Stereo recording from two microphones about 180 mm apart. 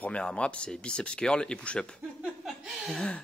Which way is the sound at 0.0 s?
5° left (ahead or behind).